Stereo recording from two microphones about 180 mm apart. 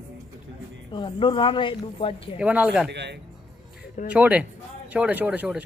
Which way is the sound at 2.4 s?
5° right (ahead or behind).